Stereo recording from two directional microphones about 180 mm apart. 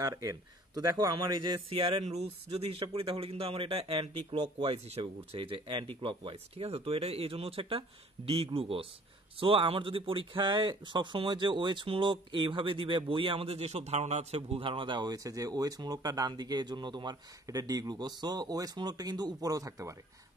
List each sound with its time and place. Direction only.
0.0 s speech: 20° right (ahead or behind)
2.0 s speech: 35° right (ahead or behind); by 20.0 s 20° right (ahead or behind)